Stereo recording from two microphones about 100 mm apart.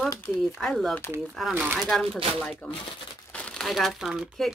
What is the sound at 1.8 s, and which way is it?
Speech, centre (ahead or behind).